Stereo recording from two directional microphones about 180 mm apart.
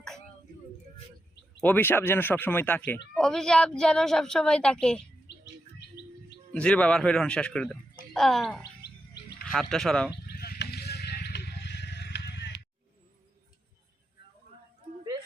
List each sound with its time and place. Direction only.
1.6 s a woman's voice: 10° left (ahead or behind)
6.5 s a woman's voice: 5° left (ahead or behind)
10.3 s a sound: 55° left (ahead or behind)